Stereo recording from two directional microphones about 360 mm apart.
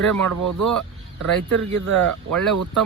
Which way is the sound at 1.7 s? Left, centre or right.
Right.